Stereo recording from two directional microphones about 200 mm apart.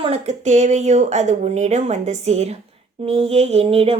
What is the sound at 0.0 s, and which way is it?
Speech, 30° right (ahead or behind).